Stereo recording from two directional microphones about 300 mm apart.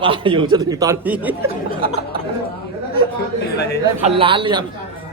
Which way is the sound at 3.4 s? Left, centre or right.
Left.